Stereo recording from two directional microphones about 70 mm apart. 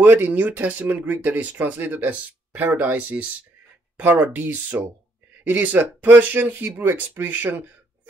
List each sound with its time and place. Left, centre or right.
0.0 s speech: right